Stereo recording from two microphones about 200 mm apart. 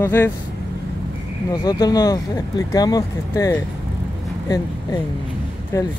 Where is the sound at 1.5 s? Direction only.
20° left (ahead or behind).